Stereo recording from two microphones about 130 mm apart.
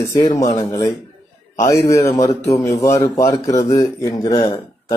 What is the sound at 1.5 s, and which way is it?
Speech, 25° left (ahead or behind).